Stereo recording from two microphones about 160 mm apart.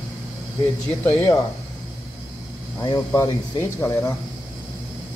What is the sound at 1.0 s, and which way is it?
Speech, 15° left (ahead or behind).